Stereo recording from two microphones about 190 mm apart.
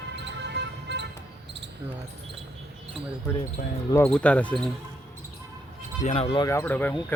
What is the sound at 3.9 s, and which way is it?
Speech, 10° left (ahead or behind).